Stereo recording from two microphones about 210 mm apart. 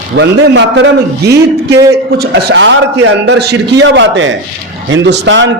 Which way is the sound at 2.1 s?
50° right (ahead or behind).